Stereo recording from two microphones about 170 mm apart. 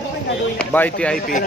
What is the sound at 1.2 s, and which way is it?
Speech, 55° left (ahead or behind).